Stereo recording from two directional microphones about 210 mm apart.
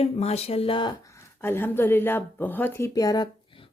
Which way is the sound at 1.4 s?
10° left (ahead or behind).